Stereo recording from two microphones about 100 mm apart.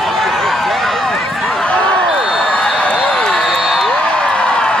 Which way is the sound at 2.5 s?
10° left (ahead or behind).